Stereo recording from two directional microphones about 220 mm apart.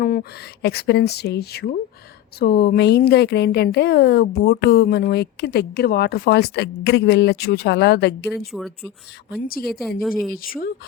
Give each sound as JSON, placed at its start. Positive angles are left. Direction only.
{"t": 0.0, "sound": "a woman's voice", "side_deg": 40}
{"t": 8.2, "sound": "speech", "side_deg": 0}
{"t": 9.4, "sound": "a woman's voice", "side_deg": 40}